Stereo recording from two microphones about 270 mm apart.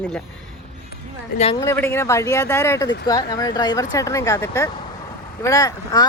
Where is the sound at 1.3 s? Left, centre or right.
Left.